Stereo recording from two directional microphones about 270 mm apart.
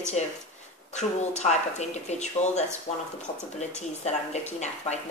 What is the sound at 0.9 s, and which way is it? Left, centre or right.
A woman's voice, left.